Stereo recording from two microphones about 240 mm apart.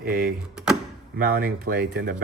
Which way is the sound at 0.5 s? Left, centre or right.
Centre.